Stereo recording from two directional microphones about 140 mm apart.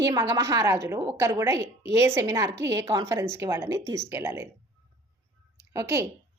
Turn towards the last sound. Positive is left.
turn(degrees=-20)  # may be behind; listen again after turning